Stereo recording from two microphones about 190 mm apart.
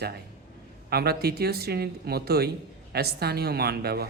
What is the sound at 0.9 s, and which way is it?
Speech, 55° right (ahead or behind).